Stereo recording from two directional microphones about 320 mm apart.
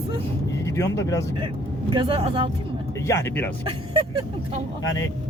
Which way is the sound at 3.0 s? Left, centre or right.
Centre.